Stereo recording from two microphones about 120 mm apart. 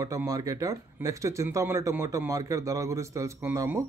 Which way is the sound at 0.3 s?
30° right (ahead or behind).